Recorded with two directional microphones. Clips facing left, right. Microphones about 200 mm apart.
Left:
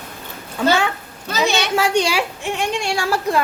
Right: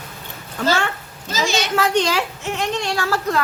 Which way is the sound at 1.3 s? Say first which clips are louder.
Left 2 dB; 60° left (ahead or behind).